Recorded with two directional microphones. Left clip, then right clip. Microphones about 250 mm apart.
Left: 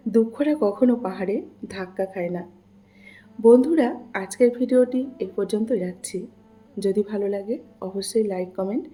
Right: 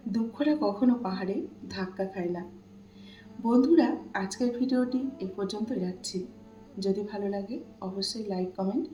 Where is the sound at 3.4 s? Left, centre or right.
Left.